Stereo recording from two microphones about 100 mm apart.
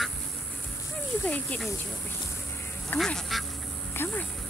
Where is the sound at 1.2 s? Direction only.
15° left (ahead or behind).